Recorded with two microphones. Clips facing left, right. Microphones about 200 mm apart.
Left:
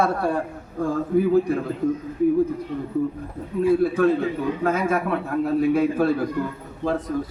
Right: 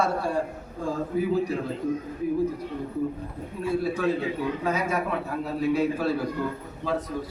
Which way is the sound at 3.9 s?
55° left (ahead or behind).